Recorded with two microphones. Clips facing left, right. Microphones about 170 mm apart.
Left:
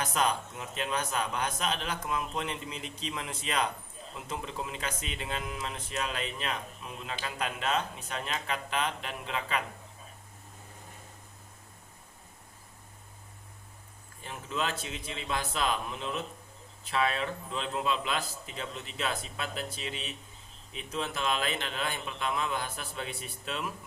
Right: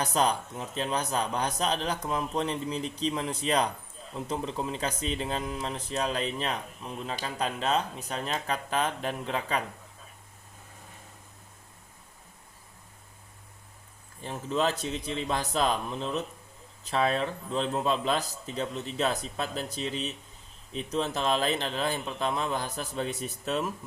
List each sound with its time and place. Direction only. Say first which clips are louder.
0.0 s speech: right 3 dB; 35° right (ahead or behind)
14.2 s speech: right 6 dB; 35° right (ahead or behind)